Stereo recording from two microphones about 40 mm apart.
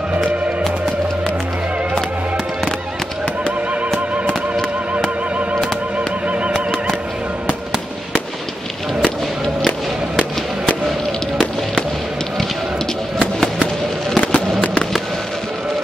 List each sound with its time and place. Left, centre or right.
5.9 s music: right
6.5 s music: centre
14.1 s fireworks: left